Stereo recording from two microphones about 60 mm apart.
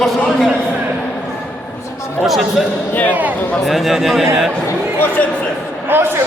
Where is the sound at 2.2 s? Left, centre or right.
Centre.